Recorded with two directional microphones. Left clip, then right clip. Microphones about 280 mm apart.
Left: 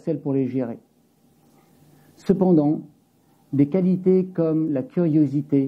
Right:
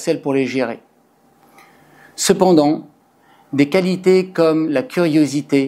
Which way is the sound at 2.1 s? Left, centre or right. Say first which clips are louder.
Right 8 dB; centre.